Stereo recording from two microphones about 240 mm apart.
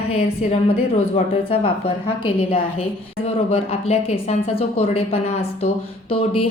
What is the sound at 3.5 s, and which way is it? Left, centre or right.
A woman's voice, left.